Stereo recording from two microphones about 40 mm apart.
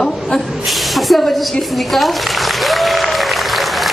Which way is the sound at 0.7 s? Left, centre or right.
Centre.